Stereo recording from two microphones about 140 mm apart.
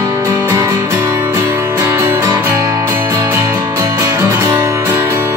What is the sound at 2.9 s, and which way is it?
Music, 15° right (ahead or behind).